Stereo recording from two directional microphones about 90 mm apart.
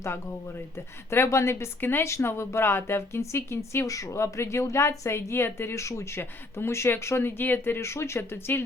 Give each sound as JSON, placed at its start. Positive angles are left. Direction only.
{"t": 1.1, "sound": "speech", "side_deg": 30}